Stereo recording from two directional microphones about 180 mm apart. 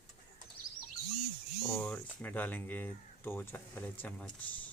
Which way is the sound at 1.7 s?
10° left (ahead or behind).